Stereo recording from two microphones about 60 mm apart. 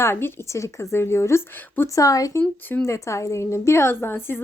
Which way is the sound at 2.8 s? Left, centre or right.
Left.